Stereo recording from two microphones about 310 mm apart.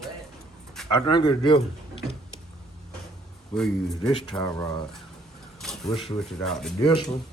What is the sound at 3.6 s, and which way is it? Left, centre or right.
Speech, centre.